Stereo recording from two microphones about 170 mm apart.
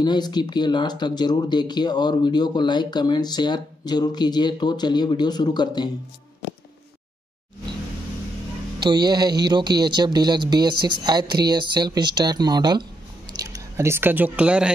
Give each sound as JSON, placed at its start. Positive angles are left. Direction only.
{"t": 0.0, "sound": "speech", "side_deg": 25}
{"t": 8.7, "sound": "speech", "side_deg": -25}